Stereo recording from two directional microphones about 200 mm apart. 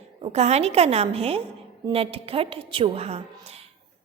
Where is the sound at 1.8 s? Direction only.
30° right (ahead or behind).